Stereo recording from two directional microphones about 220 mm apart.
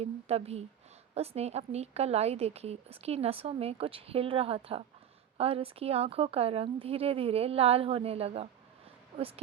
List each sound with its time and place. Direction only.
0.0 s a woman's voice: 30° right (ahead or behind)